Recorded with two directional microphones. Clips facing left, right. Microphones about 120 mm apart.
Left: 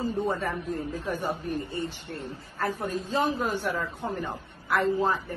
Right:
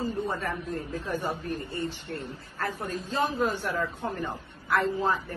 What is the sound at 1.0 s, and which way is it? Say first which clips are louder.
Speech: even; 15° left (ahead or behind).